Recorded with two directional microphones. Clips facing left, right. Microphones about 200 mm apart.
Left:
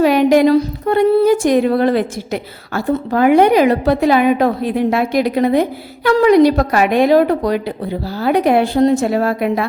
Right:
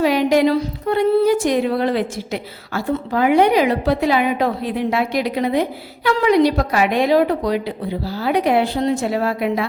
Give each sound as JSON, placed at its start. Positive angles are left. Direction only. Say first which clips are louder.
{"t": 0.0, "sound": "a woman's voice", "louder": "left 4 dB", "side_deg": 50}